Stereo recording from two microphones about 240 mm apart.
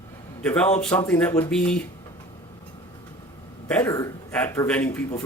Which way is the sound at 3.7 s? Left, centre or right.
Centre.